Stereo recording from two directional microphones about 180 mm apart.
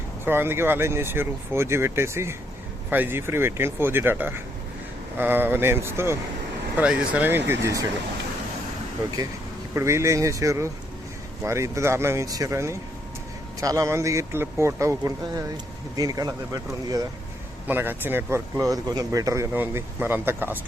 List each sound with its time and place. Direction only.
0.3 s speech: 10° right (ahead or behind)
9.7 s speech: 15° right (ahead or behind)